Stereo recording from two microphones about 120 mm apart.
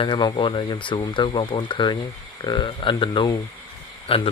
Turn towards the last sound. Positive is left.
turn(degrees=50)  # may be behind; listen again after turning